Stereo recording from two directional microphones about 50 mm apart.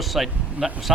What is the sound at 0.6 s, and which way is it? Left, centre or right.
Speech, right.